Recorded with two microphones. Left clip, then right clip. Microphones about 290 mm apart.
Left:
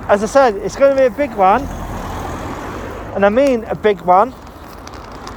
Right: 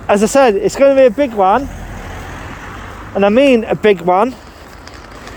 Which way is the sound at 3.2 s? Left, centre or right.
Right.